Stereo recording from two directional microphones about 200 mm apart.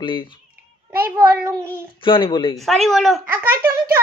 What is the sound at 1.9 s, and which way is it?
Speech, 25° left (ahead or behind).